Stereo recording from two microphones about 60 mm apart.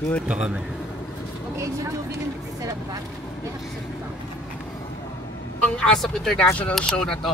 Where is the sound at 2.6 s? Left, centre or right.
Right.